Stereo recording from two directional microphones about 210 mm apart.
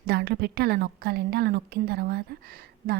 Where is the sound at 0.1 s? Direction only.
50° right (ahead or behind).